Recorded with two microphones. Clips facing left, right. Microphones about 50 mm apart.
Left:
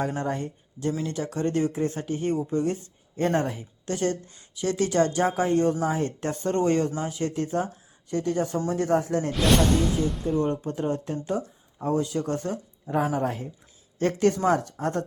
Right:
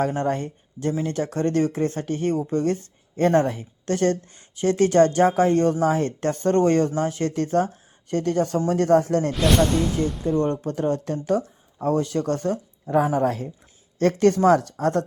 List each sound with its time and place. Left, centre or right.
0.1 s speech: right
4.4 s speech: right
8.7 s speech: right